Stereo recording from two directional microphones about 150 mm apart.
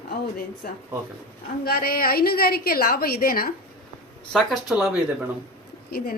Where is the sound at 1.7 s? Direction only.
80° left.